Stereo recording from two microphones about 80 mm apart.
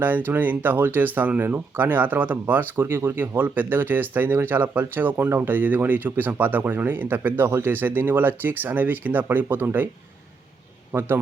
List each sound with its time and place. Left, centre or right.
0.0 s speech: right